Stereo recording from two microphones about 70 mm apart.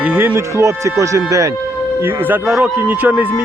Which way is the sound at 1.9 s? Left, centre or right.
Right.